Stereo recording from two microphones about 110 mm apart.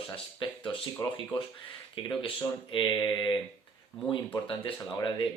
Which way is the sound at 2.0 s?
50° left (ahead or behind).